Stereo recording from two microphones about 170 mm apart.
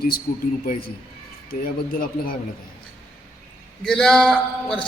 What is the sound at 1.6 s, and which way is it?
Speech, 60° left (ahead or behind).